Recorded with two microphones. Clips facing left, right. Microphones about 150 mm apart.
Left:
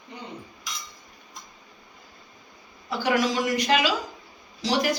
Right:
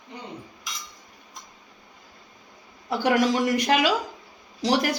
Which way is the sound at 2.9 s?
55° right (ahead or behind).